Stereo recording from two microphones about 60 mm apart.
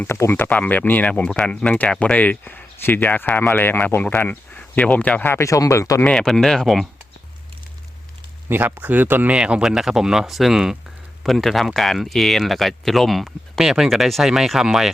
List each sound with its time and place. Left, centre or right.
0.0 s speech: left
1.3 s speech: centre
2.1 s speech: left
5.4 s speech: left
6.1 s speech: centre
8.7 s speech: right
9.3 s speech: centre